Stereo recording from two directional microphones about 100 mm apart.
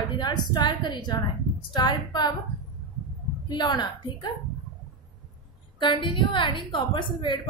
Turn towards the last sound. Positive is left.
turn(degrees=50)  # may be behind; listen again after turning